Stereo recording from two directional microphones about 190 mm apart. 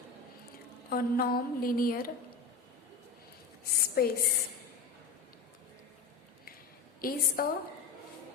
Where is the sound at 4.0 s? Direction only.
55° left (ahead or behind).